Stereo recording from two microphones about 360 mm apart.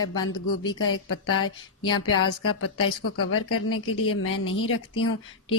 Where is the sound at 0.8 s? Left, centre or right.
Left.